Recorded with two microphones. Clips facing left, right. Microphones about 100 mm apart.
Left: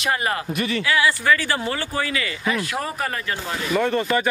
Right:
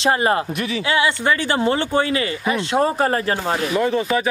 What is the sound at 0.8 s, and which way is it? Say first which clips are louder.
Speech: right 1 dB; 25° right (ahead or behind).